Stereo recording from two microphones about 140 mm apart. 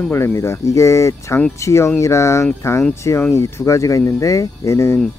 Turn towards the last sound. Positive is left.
turn(degrees=20)  # may be behind; listen again after turning